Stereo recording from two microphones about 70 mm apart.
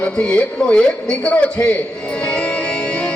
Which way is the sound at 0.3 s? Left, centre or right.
Centre.